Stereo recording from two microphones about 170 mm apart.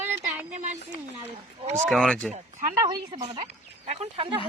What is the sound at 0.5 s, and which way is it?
Speech, 45° right (ahead or behind).